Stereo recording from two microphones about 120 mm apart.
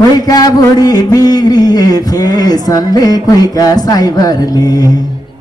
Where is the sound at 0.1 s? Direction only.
35° left (ahead or behind).